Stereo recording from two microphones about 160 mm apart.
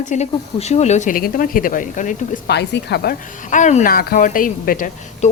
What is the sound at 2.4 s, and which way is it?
Speech, 90° left.